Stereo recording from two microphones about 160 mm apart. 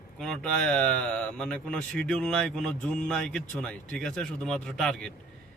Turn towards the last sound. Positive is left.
turn(degrees=5)  # may be behind; listen again after turning